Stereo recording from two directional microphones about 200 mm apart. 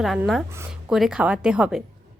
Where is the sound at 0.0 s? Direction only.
Centre (ahead or behind).